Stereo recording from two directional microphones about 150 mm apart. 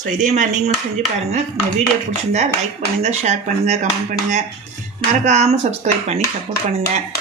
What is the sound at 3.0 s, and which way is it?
Speech, 50° right (ahead or behind).